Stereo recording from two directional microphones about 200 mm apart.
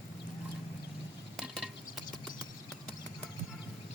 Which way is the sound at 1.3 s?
Centre (ahead or behind).